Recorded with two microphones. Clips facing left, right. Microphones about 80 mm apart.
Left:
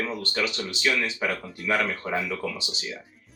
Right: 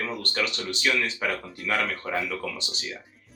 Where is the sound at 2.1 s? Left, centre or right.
Centre.